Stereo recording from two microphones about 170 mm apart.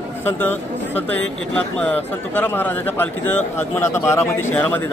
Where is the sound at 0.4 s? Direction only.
10° left (ahead or behind).